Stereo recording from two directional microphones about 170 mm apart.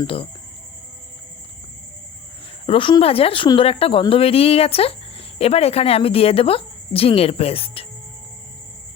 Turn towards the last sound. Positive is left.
turn(degrees=35)  # may be behind; listen again after turning